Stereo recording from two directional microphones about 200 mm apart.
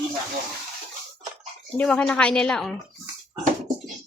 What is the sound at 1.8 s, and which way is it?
Speech, 5° left (ahead or behind).